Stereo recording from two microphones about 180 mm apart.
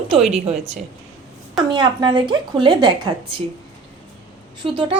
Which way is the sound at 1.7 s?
25° right (ahead or behind).